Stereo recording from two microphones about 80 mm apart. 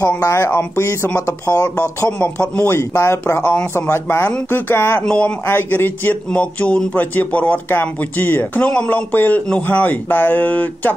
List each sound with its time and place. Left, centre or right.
0.2 s speech: left
2.0 s speech: centre
2.7 s speech: left
5.0 s speech: centre
5.5 s speech: left